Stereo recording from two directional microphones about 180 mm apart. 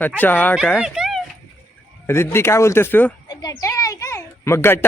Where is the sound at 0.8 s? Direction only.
5° right (ahead or behind).